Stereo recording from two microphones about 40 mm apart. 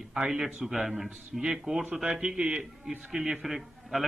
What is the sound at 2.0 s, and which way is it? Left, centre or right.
A man's voice, right.